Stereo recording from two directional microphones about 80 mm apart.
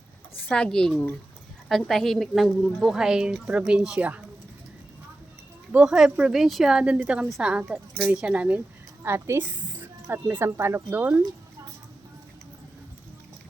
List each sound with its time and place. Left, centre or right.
0.4 s a woman's voice: centre
5.7 s speech: centre
9.0 s a woman's voice: right